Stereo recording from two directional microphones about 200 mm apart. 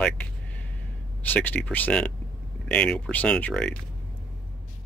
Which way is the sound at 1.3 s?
10° left (ahead or behind).